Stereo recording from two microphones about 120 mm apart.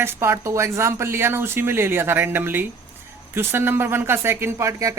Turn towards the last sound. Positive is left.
turn(degrees=-25)  # may be behind; listen again after turning